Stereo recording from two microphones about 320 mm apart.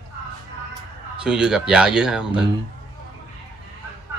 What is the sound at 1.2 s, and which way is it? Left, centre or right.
Speech, centre.